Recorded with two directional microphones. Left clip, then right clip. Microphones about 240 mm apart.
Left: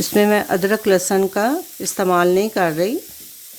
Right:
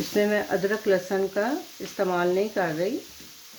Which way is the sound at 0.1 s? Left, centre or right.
Left.